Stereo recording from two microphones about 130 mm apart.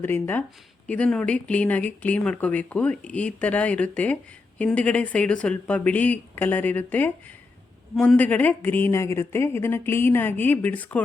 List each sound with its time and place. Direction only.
0.0 s speech: 15° left (ahead or behind)